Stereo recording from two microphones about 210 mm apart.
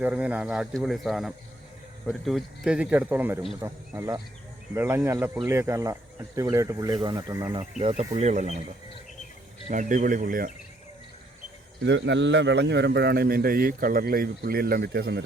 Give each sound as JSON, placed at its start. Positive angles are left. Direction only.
{"t": 0.0, "sound": "speech", "side_deg": -5}
{"t": 7.8, "sound": "speech", "side_deg": -30}
{"t": 9.6, "sound": "speech", "side_deg": -35}
{"t": 11.9, "sound": "a man's voice", "side_deg": -55}